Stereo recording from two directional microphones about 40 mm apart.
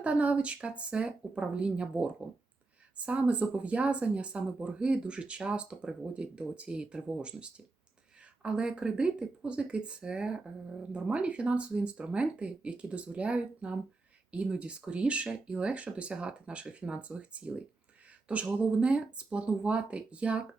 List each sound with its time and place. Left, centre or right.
0.0 s speech: right